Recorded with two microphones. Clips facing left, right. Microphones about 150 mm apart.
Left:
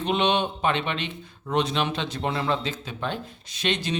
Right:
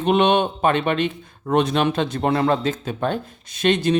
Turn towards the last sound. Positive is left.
turn(degrees=-50)  # may be behind; listen again after turning